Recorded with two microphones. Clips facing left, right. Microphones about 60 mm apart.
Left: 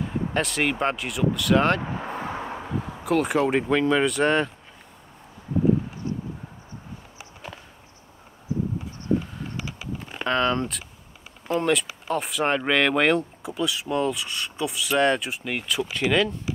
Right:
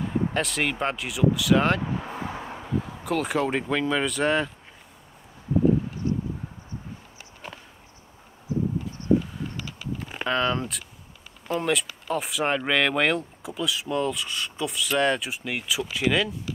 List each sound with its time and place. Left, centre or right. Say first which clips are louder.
0.3 s speech: left 2 dB; centre
1.8 s vehicle: even; left
3.0 s speech: left 5 dB; centre
10.0 s a sound: left 2 dB; centre
11.4 s speech: left 3 dB; centre